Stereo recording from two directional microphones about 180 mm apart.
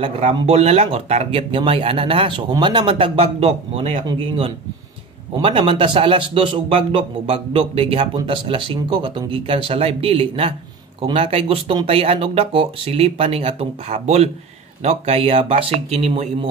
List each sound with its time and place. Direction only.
0.0 s speech: 35° right (ahead or behind)
5.4 s a man's voice: 30° right (ahead or behind)